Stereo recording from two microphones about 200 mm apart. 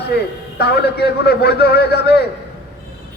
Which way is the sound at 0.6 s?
55° left (ahead or behind).